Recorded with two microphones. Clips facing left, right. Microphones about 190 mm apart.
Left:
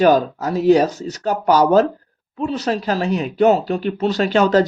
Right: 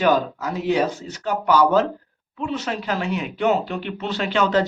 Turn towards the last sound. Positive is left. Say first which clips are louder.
# left 5 dB
turn(degrees=40)  # may be behind; listen again after turning